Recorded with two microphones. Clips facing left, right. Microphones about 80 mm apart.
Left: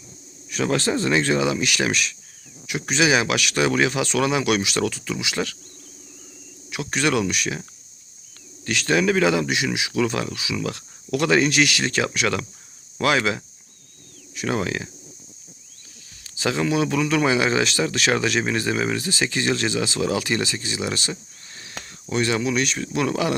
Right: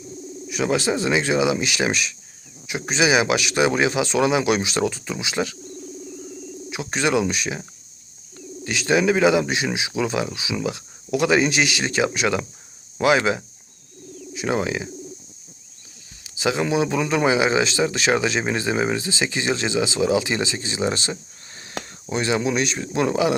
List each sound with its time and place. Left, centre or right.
0.4 s speech: centre
8.6 s speech: centre
16.2 s speech: centre